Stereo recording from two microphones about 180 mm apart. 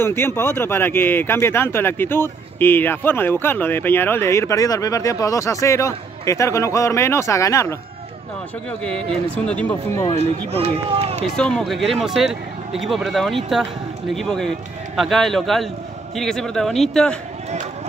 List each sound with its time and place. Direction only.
0.0 s speech: 15° left (ahead or behind)
8.8 s speech: 5° left (ahead or behind)
10.1 s speech: 30° right (ahead or behind)
11.3 s speech: 5° left (ahead or behind)